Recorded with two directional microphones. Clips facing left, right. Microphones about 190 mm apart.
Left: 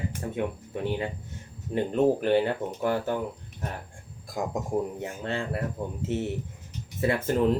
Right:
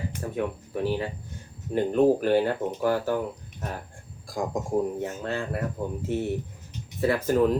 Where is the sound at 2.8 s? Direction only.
25° left (ahead or behind).